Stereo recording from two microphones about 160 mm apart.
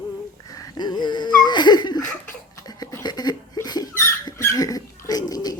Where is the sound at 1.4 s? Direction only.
25° left (ahead or behind).